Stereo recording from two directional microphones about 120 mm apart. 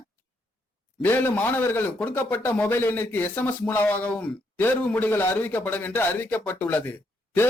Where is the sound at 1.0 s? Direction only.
15° left (ahead or behind).